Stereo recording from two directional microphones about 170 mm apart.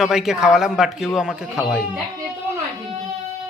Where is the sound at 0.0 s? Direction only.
5° right (ahead or behind).